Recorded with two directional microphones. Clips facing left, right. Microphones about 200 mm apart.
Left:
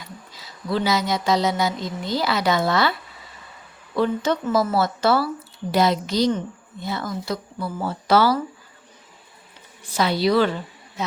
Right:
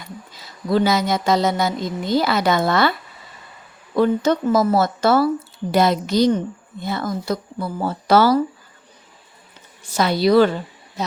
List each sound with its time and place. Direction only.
0.7 s a woman's voice: 50° right (ahead or behind)
3.9 s a woman's voice: 45° right (ahead or behind)
9.8 s a woman's voice: 45° right (ahead or behind)